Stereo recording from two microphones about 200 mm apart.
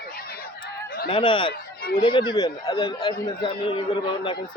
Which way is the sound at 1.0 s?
25° left (ahead or behind).